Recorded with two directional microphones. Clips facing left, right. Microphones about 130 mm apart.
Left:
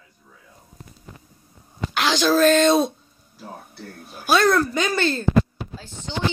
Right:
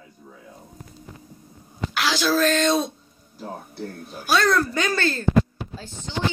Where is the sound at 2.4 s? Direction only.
Centre (ahead or behind).